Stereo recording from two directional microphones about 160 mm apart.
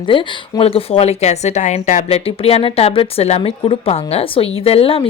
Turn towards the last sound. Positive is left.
turn(degrees=35)  # may be behind; listen again after turning